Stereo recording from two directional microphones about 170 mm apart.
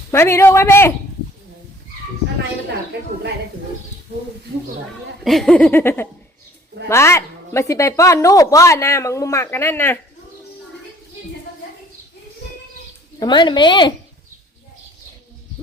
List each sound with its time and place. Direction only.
0.1 s a woman's voice: 15° left (ahead or behind)
2.9 s speech: 80° right
5.2 s a woman's voice: centre (ahead or behind)
13.1 s a woman's voice: 25° left (ahead or behind)